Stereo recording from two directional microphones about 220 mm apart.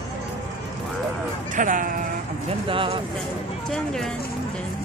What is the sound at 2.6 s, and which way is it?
Speech, 25° right (ahead or behind).